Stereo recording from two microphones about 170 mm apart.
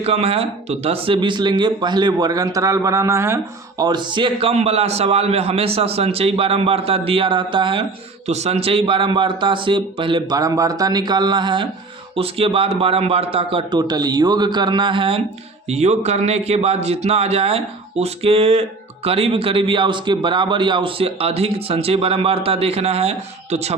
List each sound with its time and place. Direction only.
0.0 s speech: 35° right (ahead or behind)